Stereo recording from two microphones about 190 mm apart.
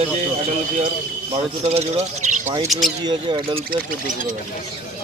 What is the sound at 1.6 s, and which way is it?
Speech, 35° right (ahead or behind).